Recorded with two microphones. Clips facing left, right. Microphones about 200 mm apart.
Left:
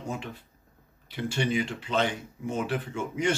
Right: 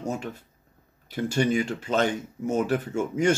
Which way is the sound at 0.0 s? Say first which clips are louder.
Right 4 dB; 45° right (ahead or behind).